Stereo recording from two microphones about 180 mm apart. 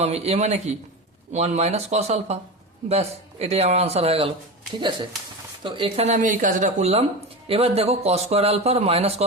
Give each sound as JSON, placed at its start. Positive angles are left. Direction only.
{"t": 0.0, "sound": "speech", "side_deg": -35}
{"t": 5.6, "sound": "speech", "side_deg": -25}
{"t": 6.1, "sound": "speech", "side_deg": -45}